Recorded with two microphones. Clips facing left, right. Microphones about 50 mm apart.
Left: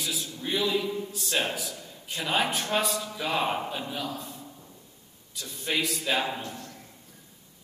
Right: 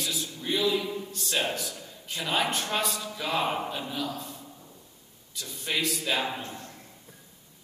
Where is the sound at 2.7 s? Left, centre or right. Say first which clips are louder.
Left 2 dB; centre.